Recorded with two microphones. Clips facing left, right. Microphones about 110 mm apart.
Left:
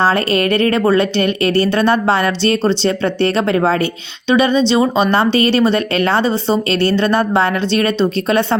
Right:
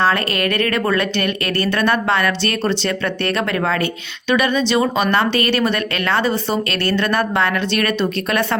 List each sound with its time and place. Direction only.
0.0 s speech: 30° left (ahead or behind)